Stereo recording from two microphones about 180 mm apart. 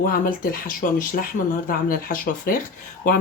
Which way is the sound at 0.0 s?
50° left (ahead or behind).